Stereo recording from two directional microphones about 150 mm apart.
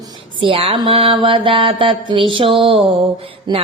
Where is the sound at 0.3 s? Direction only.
35° right (ahead or behind).